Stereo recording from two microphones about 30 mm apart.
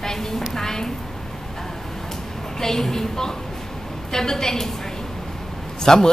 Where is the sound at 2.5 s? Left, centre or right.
Centre.